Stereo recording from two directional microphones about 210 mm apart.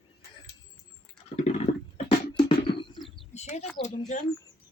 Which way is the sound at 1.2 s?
30° left (ahead or behind).